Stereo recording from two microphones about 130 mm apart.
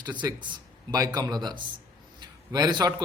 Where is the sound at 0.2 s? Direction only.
35° right (ahead or behind).